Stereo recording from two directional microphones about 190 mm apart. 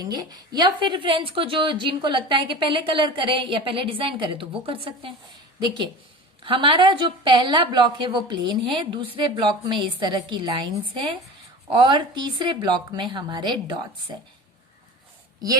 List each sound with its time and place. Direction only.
0.0 s a woman's voice: 20° right (ahead or behind)